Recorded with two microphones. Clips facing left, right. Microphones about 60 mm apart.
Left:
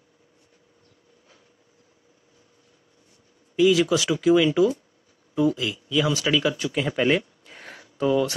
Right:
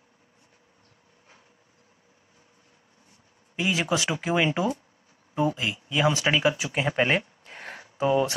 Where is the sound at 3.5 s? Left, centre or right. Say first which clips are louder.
Left 7 dB; right.